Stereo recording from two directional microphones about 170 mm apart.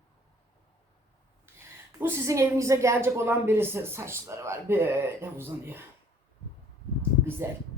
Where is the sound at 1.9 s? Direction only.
15° right (ahead or behind).